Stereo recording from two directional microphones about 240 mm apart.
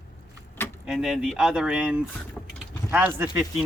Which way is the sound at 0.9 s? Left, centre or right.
Centre.